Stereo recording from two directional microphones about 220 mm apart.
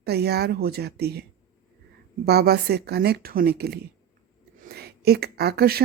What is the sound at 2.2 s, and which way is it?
A woman's voice, 45° right (ahead or behind).